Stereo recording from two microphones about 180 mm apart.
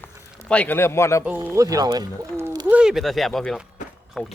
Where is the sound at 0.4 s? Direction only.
5° left (ahead or behind).